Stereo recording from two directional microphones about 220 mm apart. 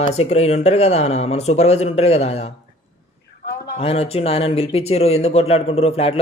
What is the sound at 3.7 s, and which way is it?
Speech, 25° left (ahead or behind).